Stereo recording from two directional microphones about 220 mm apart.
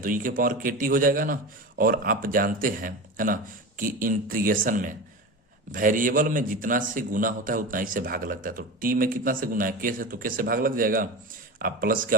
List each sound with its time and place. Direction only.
0.0 s a man's voice: 40° right (ahead or behind)